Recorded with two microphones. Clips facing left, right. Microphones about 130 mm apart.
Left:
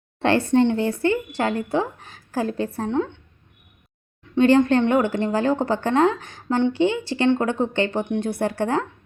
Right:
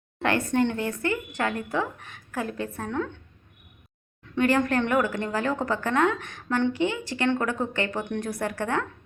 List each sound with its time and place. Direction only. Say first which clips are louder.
0.2 s a woman's voice: left 6 dB; 30° left (ahead or behind)
4.4 s a woman's voice: left 7 dB; 25° left (ahead or behind)